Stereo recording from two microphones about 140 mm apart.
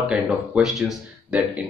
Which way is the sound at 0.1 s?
Centre (ahead or behind).